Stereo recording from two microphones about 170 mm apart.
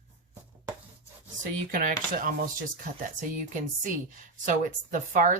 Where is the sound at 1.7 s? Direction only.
55° right (ahead or behind).